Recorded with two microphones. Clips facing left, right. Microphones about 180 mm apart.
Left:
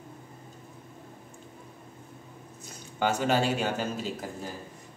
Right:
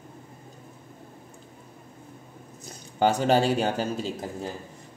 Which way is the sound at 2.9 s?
35° right (ahead or behind).